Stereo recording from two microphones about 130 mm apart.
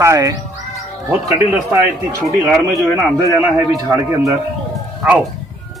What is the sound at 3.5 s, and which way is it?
Speech, 25° right (ahead or behind).